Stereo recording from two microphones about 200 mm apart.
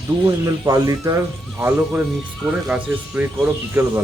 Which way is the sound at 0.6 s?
15° right (ahead or behind).